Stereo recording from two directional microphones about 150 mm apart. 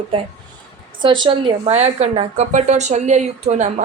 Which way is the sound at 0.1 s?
35° right (ahead or behind).